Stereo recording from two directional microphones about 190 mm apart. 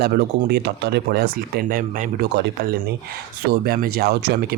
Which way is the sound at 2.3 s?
65° right (ahead or behind).